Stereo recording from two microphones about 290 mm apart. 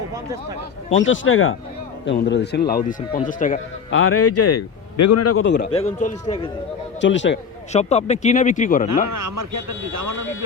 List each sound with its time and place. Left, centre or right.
1.0 s a man's voice: left
3.9 s a man's voice: left
5.7 s speech: left
7.0 s speech: left
7.7 s speech: left
9.0 s speech: right